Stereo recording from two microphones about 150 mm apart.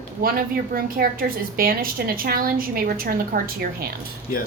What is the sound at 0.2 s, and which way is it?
A woman's voice, 75° right (ahead or behind).